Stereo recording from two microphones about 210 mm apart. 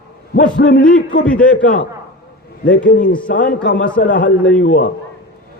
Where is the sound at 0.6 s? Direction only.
45° left (ahead or behind).